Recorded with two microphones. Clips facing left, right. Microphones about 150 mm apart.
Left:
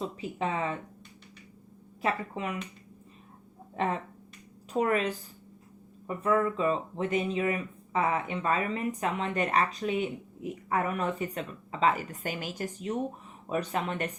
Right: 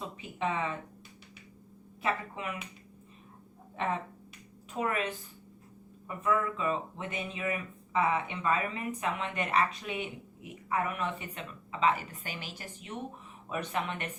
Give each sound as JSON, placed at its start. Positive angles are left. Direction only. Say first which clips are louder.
{"t": 0.2, "sound": "speech", "louder": "right 1 dB", "side_deg": 35}
{"t": 2.0, "sound": "speech", "louder": "left 3 dB", "side_deg": 35}
{"t": 4.8, "sound": "speech", "louder": "left 5 dB", "side_deg": 35}